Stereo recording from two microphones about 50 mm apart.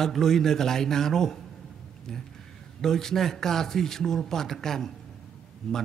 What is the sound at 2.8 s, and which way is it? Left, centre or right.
A man's voice, centre.